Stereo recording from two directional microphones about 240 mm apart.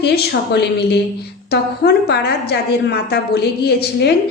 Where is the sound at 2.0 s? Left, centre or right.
Left.